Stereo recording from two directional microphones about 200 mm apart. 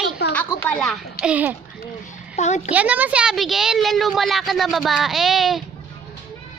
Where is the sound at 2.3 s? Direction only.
35° left (ahead or behind).